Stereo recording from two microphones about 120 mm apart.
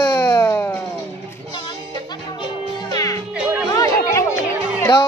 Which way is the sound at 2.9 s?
30° left (ahead or behind).